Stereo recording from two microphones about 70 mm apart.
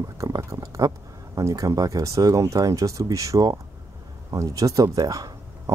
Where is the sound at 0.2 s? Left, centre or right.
Right.